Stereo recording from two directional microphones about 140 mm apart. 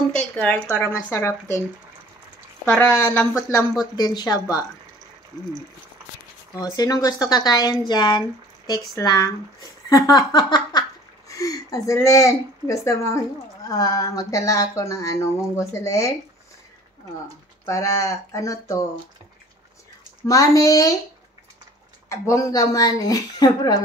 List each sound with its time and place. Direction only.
0.1 s a woman's voice: 10° left (ahead or behind)
2.8 s speech: 20° left (ahead or behind)
6.5 s speech: 25° left (ahead or behind)
9.8 s a sound: 30° left (ahead or behind)
13.7 s speech: 25° left (ahead or behind)
17.6 s speech: 25° left (ahead or behind)
20.2 s speech: 25° left (ahead or behind)
22.1 s speech: 20° left (ahead or behind)